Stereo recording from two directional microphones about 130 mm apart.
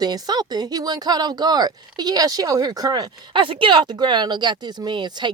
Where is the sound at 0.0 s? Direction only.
30° right (ahead or behind).